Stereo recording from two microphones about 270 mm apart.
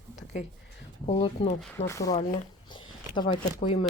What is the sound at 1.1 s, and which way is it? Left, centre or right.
Speech, left.